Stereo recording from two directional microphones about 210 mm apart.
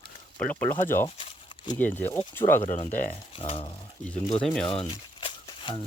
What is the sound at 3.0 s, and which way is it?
Speech, 30° left (ahead or behind).